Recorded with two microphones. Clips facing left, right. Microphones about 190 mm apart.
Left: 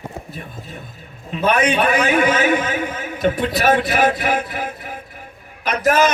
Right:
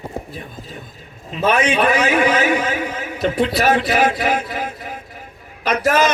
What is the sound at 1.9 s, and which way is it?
A man's voice, 50° left (ahead or behind).